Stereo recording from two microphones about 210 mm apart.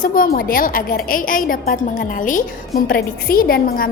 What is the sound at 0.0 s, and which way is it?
A woman's voice, 40° left (ahead or behind).